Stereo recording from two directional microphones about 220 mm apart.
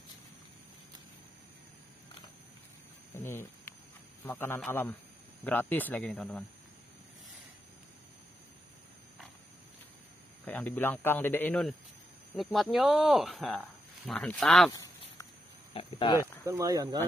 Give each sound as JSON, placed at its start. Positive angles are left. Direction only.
{"t": 3.2, "sound": "a sound", "side_deg": 10}
{"t": 4.2, "sound": "speech", "side_deg": 10}
{"t": 10.4, "sound": "speech", "side_deg": 5}
{"t": 14.7, "sound": "a sound", "side_deg": 15}
{"t": 15.7, "sound": "speech", "side_deg": 25}
{"t": 16.2, "sound": "speech", "side_deg": -15}